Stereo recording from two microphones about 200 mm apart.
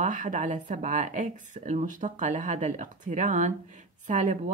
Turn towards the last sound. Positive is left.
turn(degrees=-40)  # may be behind; listen again after turning